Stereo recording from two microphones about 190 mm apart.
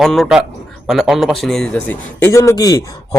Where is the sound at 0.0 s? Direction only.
Centre (ahead or behind).